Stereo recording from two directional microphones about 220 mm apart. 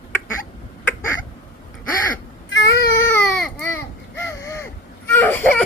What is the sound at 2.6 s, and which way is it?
Baby cry, 50° left (ahead or behind).